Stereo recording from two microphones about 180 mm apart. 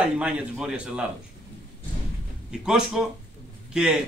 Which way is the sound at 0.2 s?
5° right (ahead or behind).